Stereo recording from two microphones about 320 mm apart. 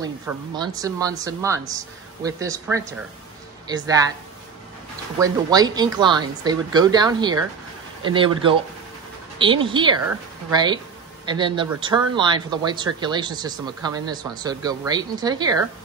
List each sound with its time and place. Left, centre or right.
0.6 s speech: centre
5.2 s speech: centre